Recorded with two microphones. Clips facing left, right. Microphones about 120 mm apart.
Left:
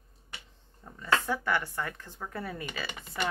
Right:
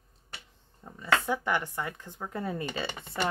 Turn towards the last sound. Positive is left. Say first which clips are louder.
# right 4 dB
turn(degrees=-25)  # may be behind; listen again after turning